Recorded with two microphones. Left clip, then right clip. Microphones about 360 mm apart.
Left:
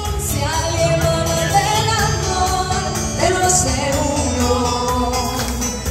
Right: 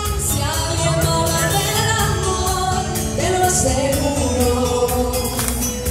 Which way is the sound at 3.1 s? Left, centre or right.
Centre.